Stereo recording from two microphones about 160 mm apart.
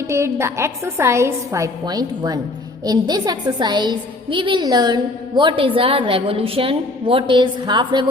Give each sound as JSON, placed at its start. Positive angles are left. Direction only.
{"t": 0.1, "sound": "a woman's voice", "side_deg": -15}